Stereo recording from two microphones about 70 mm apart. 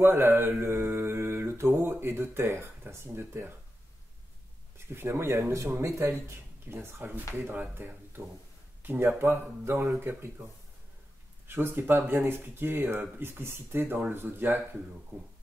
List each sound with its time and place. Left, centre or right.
0.0 s mantra: right
4.7 s mantra: right
8.8 s mantra: right
11.4 s mantra: right